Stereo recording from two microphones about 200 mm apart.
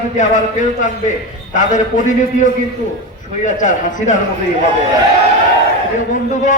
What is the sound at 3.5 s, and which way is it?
Speech, 40° left (ahead or behind).